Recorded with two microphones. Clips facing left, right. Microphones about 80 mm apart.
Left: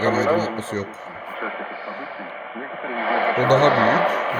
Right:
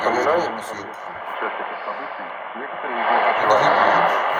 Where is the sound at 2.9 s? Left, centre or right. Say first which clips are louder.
Right 3 dB; right.